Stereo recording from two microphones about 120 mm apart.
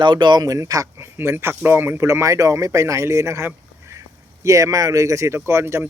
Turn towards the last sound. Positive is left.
turn(degrees=-20)  # may be behind; listen again after turning